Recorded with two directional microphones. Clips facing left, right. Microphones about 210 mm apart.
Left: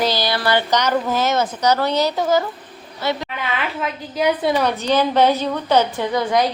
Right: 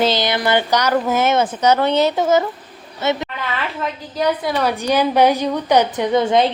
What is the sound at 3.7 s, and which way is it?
Speech, 5° left (ahead or behind).